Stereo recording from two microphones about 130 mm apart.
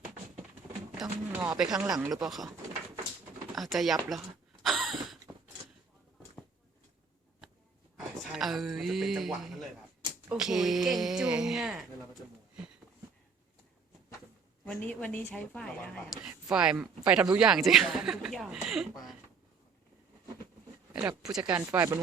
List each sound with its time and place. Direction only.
1.3 s speech: 15° right (ahead or behind)
3.5 s speech: centre (ahead or behind)
4.1 s a sound: centre (ahead or behind)
7.9 s speech: centre (ahead or behind)
14.6 s speech: 10° left (ahead or behind)
16.2 s speech: 5° right (ahead or behind)
20.9 s speech: 10° right (ahead or behind)
21.7 s speech: 25° right (ahead or behind)